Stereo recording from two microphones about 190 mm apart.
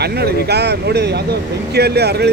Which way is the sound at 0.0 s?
60° right (ahead or behind).